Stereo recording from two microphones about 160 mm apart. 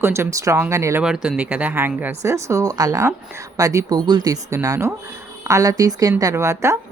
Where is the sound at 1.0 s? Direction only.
5° right (ahead or behind).